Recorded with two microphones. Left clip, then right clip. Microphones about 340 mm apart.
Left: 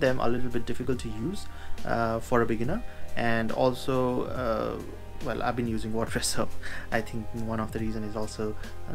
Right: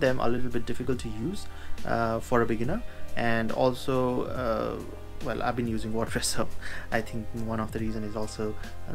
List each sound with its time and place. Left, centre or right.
0.0 s speech: centre
2.0 s speech: left
2.2 s speech: centre